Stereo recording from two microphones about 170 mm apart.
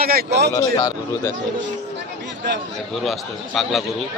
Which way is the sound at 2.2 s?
90° right.